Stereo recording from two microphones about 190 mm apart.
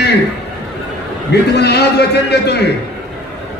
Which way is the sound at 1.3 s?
60° left (ahead or behind).